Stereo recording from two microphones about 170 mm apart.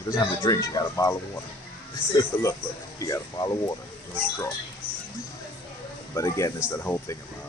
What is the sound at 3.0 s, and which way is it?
Speech, 20° left (ahead or behind).